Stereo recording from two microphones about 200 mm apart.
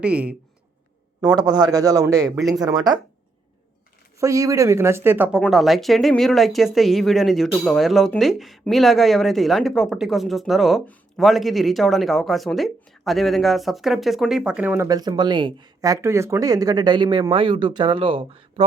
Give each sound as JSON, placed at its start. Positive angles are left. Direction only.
{"t": 0.0, "sound": "speech", "side_deg": -5}
{"t": 1.2, "sound": "speech", "side_deg": -20}
{"t": 4.2, "sound": "speech", "side_deg": -15}